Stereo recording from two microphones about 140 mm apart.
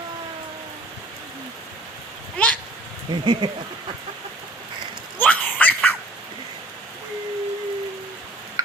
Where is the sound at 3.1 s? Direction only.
30° right (ahead or behind).